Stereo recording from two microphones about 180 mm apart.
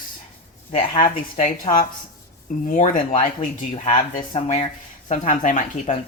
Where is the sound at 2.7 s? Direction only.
45° left (ahead or behind).